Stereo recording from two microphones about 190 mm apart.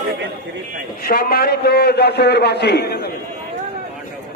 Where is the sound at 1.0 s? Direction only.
55° left (ahead or behind).